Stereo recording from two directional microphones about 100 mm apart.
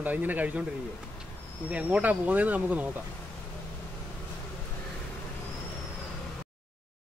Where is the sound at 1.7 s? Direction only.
15° right (ahead or behind).